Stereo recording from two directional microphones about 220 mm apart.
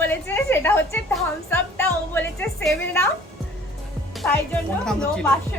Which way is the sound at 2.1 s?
10° left (ahead or behind).